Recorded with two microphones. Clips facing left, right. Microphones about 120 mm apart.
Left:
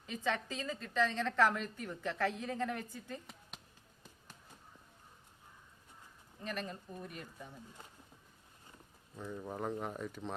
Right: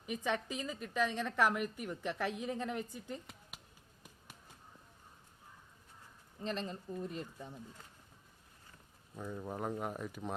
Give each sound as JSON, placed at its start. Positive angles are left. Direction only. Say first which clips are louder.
{"t": 0.0, "sound": "a woman's voice", "louder": "even", "side_deg": -15}
{"t": 6.4, "sound": "speech", "louder": "right 2 dB", "side_deg": -25}
{"t": 9.1, "sound": "a woman's voice", "louder": "right 1 dB", "side_deg": -10}